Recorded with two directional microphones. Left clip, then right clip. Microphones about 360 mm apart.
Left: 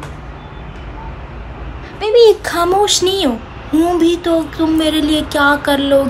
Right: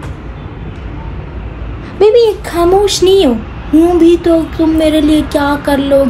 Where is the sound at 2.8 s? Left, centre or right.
Centre.